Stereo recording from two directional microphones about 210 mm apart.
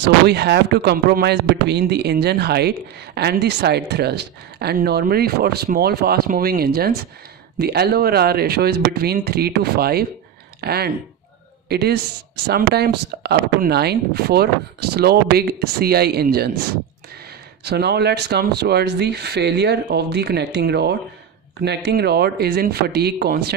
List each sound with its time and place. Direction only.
0.0 s speech: 50° right (ahead or behind)
17.6 s speech: 50° right (ahead or behind)